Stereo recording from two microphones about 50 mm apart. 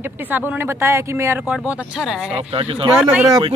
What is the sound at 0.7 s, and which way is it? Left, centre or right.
Speech, right.